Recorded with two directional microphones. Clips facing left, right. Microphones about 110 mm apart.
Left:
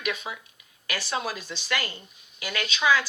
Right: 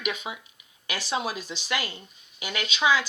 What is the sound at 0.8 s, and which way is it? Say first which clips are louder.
Speech: right 1 dB; 20° right (ahead or behind).